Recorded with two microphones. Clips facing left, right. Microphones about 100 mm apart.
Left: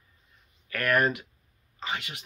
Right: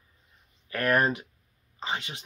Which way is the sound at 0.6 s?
30° right (ahead or behind).